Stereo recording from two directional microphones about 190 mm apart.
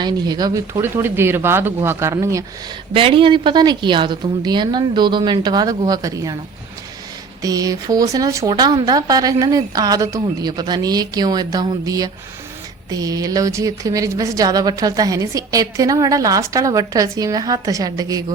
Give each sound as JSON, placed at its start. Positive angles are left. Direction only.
{"t": 0.0, "sound": "a woman's voice", "side_deg": -20}
{"t": 2.9, "sound": "speech", "side_deg": -30}
{"t": 7.4, "sound": "a woman's voice", "side_deg": -20}